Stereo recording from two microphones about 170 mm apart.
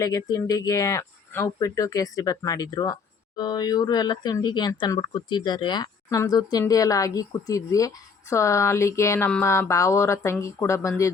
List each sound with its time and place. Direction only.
0.0 s speech: 20° left (ahead or behind)